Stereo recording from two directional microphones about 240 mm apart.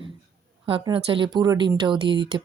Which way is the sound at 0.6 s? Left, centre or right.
Right.